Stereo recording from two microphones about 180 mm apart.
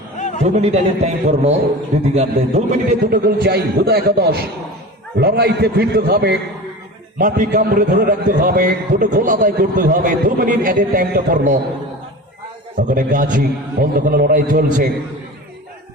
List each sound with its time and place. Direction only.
0.2 s a sound: 40° left (ahead or behind)
0.4 s a man's voice: 35° right (ahead or behind)
3.4 s a man's voice: 60° right (ahead or behind)
7.2 s a man's voice: 50° right (ahead or behind)
12.7 s a man's voice: 50° right (ahead or behind)